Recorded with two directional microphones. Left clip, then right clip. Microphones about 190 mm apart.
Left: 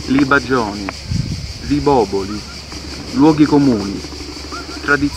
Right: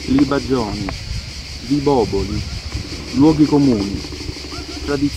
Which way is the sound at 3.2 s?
25° left (ahead or behind).